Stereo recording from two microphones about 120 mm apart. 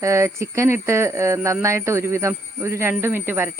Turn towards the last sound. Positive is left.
turn(degrees=-15)  # may be behind; listen again after turning